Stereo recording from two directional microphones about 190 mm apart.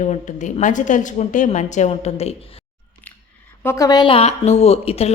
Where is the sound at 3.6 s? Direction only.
15° left (ahead or behind); by 5.1 s 30° left (ahead or behind).